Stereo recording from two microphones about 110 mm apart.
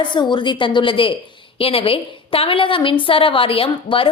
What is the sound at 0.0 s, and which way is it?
A woman's voice, 45° left (ahead or behind).